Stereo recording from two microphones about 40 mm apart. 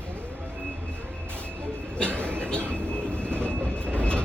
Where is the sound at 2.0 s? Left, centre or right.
Right.